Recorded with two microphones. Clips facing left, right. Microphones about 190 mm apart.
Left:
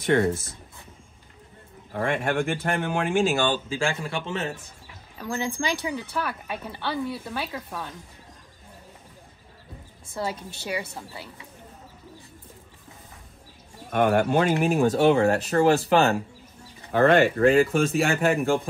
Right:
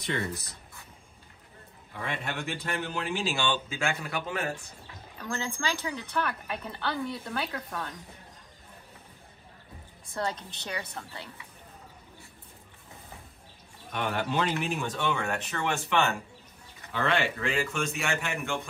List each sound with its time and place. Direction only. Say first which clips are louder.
0.0 s speech: left 11 dB; 55° left (ahead or behind)
1.9 s speech: left 10 dB; 65° left (ahead or behind); by 4.5 s 25° left (ahead or behind)
5.2 s a woman's voice: left 5 dB; 15° left (ahead or behind)
10.1 s a woman's voice: left 2 dB; 10° left (ahead or behind)
13.9 s speech: left 9 dB; 50° left (ahead or behind)
14.8 s speech: left 12 dB; 35° left (ahead or behind)
16.9 s speech: left 10 dB; 50° left (ahead or behind)
17.6 s speech: left 9 dB; 35° left (ahead or behind)